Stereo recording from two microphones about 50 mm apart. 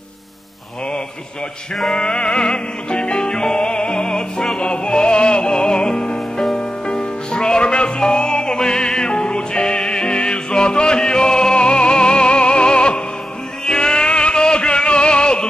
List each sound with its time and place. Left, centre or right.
1.9 s music: centre